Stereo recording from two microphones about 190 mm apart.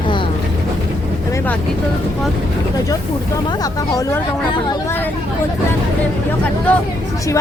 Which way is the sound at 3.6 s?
15° left (ahead or behind).